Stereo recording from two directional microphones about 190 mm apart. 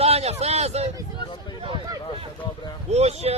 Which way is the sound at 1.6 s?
25° right (ahead or behind).